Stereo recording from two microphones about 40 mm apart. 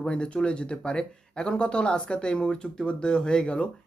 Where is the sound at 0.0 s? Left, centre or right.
Left.